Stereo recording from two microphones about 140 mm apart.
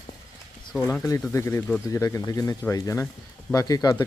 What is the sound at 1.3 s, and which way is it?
Speech, 20° left (ahead or behind).